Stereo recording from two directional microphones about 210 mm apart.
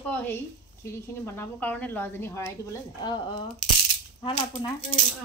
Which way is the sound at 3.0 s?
20° left (ahead or behind).